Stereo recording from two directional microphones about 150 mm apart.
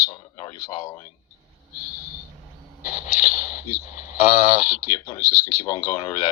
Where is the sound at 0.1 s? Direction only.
30° left (ahead or behind).